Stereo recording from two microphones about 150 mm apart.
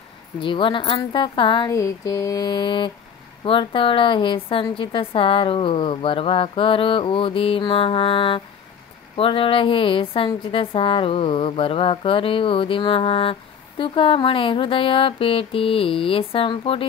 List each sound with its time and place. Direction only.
0.4 s a woman's voice: 35° left (ahead or behind)
1.7 s mantra: 25° left (ahead or behind)
3.4 s a woman's voice: 35° left (ahead or behind)